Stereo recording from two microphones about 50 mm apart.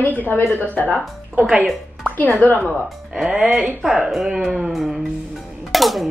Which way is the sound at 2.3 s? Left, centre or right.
Left.